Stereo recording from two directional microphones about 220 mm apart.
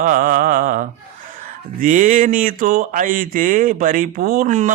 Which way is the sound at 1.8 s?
35° right (ahead or behind).